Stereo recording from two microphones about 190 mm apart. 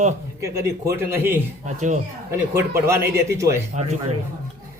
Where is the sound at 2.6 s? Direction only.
15° right (ahead or behind).